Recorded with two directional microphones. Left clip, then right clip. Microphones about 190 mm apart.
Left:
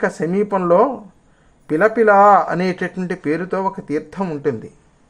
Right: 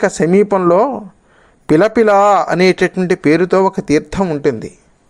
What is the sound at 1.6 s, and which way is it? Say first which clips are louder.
Speech: right 3 dB; 40° right (ahead or behind).